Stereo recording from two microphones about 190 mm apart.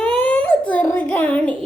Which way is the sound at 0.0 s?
5° left (ahead or behind).